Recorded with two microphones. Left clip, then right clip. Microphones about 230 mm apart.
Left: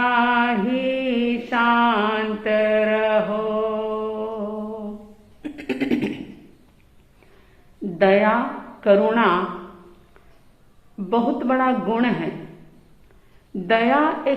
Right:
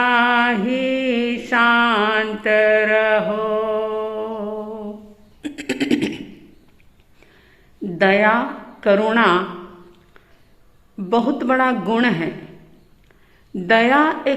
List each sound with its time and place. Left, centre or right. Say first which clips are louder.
0.0 s mantra: right 3 dB; right
5.4 s a sound: right 3 dB; right
7.9 s a sound: right 2 dB; right
8.8 s a man's voice: right 1 dB; right
10.9 s a man's voice: right 2 dB; right
13.6 s a man's voice: right 4 dB; right